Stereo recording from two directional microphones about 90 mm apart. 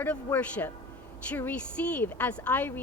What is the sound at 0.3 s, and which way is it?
Speech, 20° left (ahead or behind).